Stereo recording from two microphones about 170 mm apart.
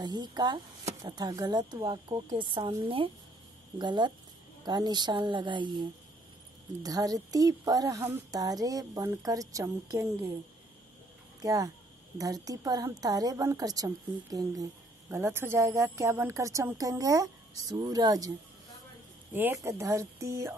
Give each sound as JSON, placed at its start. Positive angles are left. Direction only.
{"t": 0.0, "sound": "a woman's voice", "side_deg": -25}
{"t": 11.4, "sound": "a woman's voice", "side_deg": -20}
{"t": 19.3, "sound": "speech", "side_deg": -15}